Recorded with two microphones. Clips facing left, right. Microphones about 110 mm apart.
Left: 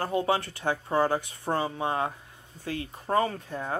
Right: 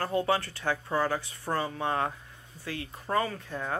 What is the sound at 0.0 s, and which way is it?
Speech, 20° left (ahead or behind).